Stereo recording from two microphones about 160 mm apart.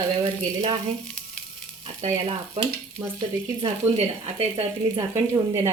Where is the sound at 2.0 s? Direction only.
40° right (ahead or behind).